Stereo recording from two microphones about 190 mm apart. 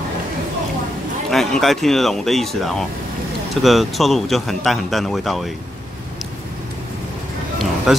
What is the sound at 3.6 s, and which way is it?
Speech, centre (ahead or behind).